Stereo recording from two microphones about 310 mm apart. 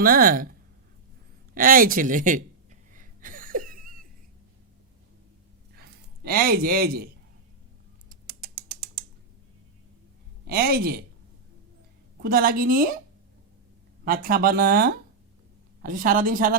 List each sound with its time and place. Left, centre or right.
0.0 s speech: right
1.5 s a sound: right
5.7 s a sound: right
8.1 s mechanisms: right
10.4 s speech: right
12.2 s speech: right
14.0 s speech: right